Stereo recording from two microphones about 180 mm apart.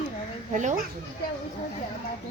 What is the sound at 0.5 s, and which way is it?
Speech, 45° right (ahead or behind).